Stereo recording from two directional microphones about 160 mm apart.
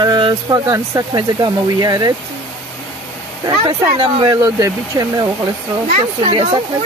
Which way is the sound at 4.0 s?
25° right (ahead or behind).